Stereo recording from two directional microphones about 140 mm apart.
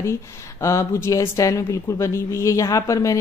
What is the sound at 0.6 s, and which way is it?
A woman's voice, 20° left (ahead or behind).